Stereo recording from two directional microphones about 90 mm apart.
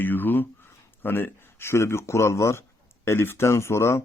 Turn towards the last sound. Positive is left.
turn(degrees=30)  # may be behind; listen again after turning